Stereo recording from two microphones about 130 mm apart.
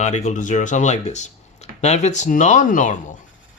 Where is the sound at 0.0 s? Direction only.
65° left (ahead or behind).